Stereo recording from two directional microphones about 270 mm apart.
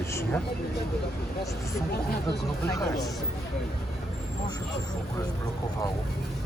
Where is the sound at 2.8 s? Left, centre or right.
Centre.